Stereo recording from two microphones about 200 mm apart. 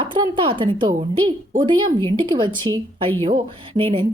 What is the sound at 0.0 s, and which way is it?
Speech, 25° right (ahead or behind).